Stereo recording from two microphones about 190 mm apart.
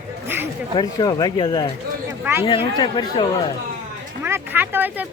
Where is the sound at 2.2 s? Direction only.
10° right (ahead or behind).